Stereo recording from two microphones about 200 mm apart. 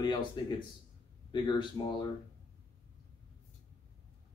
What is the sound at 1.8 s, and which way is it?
Speech, 25° left (ahead or behind).